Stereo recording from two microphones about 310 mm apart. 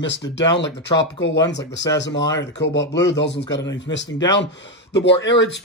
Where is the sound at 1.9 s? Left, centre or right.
Centre.